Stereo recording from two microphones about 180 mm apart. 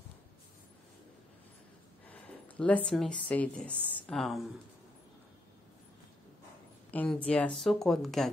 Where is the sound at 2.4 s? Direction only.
10° left (ahead or behind).